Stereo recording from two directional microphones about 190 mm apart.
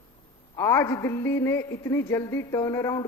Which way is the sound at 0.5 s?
15° left (ahead or behind).